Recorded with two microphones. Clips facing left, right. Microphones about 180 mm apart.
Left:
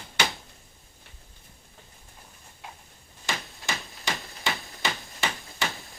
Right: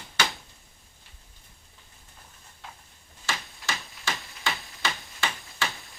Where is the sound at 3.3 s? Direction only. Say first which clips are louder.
Left 1 dB; 15° left (ahead or behind).